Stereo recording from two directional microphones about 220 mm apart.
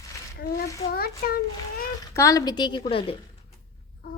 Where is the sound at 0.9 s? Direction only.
45° left (ahead or behind).